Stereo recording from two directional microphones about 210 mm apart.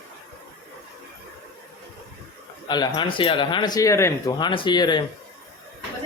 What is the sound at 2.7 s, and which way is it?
Speech, 20° left (ahead or behind).